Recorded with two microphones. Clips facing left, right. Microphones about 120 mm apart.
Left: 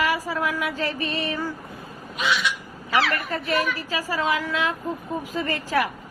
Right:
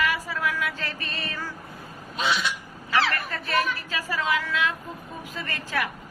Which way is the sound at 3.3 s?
25° left (ahead or behind).